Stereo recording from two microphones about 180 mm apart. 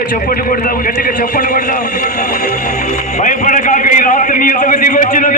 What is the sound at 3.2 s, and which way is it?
A man's voice, 45° left (ahead or behind).